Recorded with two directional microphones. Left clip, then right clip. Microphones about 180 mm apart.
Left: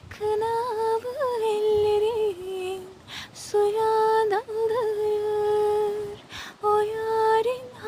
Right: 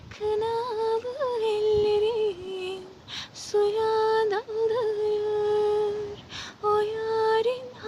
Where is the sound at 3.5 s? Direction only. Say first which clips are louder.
Left 2 dB; 45° left (ahead or behind).